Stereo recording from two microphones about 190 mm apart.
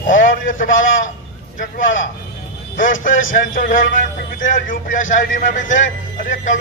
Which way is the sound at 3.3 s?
45° left (ahead or behind).